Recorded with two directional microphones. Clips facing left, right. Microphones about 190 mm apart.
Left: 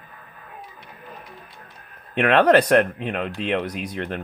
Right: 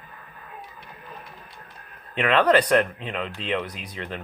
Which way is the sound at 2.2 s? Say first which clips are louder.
Left 3 dB; 55° left (ahead or behind).